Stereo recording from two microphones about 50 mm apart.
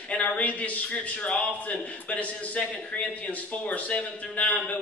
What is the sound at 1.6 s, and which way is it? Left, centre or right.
A man's voice, left.